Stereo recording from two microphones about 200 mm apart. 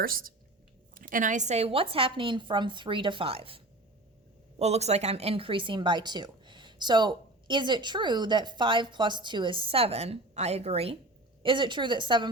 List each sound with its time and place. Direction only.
0.0 s a woman's voice: 45° right (ahead or behind); by 12.3 s 25° right (ahead or behind)